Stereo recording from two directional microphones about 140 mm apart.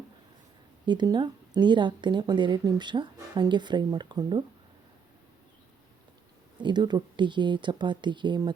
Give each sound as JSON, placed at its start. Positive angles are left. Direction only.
{"t": 0.9, "sound": "speech", "side_deg": -30}
{"t": 6.6, "sound": "speech", "side_deg": -30}